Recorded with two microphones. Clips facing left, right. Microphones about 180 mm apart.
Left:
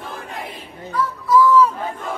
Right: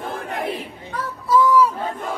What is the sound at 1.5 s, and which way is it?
Battle cry, 10° right (ahead or behind).